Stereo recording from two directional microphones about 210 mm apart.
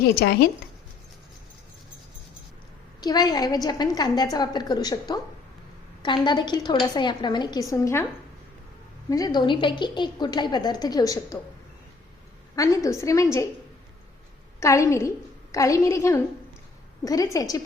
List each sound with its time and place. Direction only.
0.0 s speech: 50° left (ahead or behind)
3.0 s a woman's voice: 20° left (ahead or behind)
9.0 s a woman's voice: 15° left (ahead or behind)
12.5 s a woman's voice: 15° left (ahead or behind)
14.6 s a woman's voice: 15° left (ahead or behind)